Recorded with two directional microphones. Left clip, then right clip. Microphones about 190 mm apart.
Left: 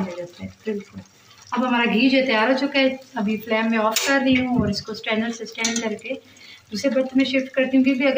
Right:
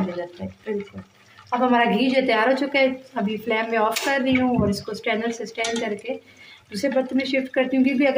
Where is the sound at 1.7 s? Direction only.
65° right (ahead or behind).